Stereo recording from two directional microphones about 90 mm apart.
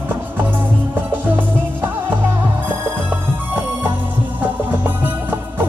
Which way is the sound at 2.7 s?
25° right (ahead or behind).